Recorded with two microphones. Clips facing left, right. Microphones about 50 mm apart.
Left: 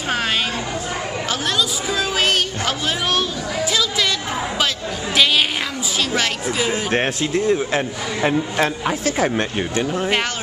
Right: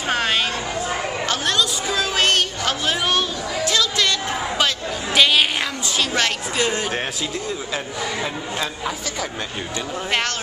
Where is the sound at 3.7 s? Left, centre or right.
Centre.